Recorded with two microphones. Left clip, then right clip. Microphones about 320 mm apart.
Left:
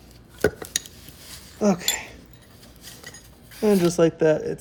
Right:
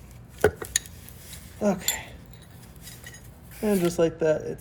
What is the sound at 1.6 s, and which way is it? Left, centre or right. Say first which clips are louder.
Cutlery: left 4 dB; left.